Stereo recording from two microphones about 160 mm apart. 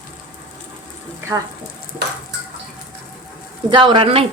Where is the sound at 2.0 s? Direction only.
90° right.